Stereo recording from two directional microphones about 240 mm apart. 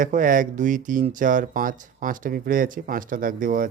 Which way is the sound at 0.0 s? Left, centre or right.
Right.